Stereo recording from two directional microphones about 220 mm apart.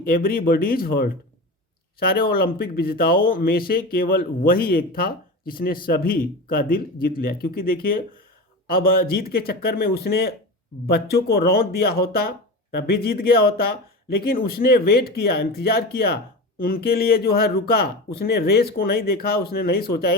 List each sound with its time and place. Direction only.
0.0 s speech: 40° left (ahead or behind)